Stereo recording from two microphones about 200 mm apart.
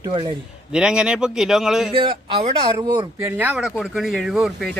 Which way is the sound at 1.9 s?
30° right (ahead or behind).